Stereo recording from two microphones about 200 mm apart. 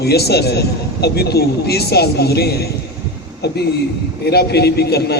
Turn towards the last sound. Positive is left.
turn(degrees=55)  # may be behind; listen again after turning